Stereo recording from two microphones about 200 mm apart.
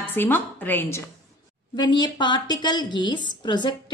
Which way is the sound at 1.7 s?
20° left (ahead or behind).